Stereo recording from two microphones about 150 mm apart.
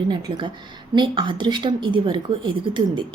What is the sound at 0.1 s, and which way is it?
A woman's voice, 30° right (ahead or behind).